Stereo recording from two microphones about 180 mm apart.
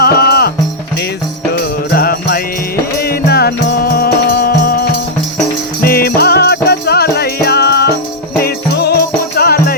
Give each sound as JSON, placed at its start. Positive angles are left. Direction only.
{"t": 0.0, "sound": "music", "side_deg": 60}
{"t": 1.9, "sound": "music", "side_deg": 55}